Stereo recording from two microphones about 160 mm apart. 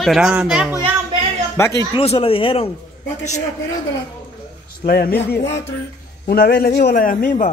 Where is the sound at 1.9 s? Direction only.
35° left (ahead or behind).